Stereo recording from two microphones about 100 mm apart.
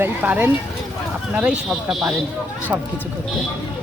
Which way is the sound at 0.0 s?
20° right (ahead or behind).